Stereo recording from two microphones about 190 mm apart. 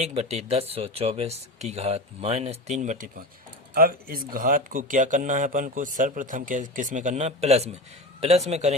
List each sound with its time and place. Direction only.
0.0 s speech: 35° right (ahead or behind)